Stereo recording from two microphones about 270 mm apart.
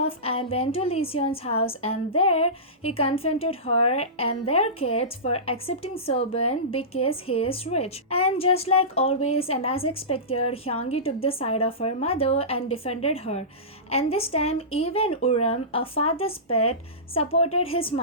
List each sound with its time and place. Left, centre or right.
0.0 s a woman's voice: left